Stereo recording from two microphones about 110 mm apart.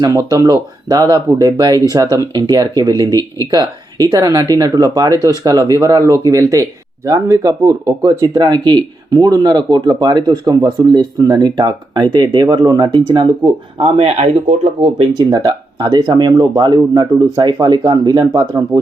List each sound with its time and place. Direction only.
0.1 s speech: 30° right (ahead or behind)
8.4 s speech: 40° right (ahead or behind)
13.8 s speech: 65° right (ahead or behind)
15.3 s speech: 35° right (ahead or behind)